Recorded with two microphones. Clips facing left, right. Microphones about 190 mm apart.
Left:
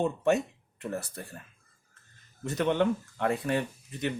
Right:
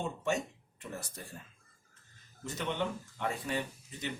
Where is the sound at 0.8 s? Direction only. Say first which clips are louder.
Left 8 dB; 60° left (ahead or behind).